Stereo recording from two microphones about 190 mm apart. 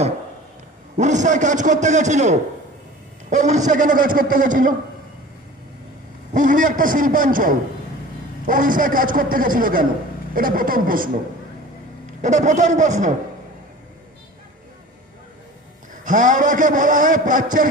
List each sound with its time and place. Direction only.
0.9 s a man's voice: 40° right (ahead or behind)
6.3 s a man's voice: 45° right (ahead or behind)
12.2 s a man's voice: 40° right (ahead or behind)
15.9 s a man's voice: 40° right (ahead or behind)